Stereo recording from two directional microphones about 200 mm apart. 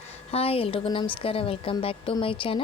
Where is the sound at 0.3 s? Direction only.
30° left (ahead or behind).